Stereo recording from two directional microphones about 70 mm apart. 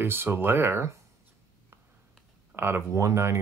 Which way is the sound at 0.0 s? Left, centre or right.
Right.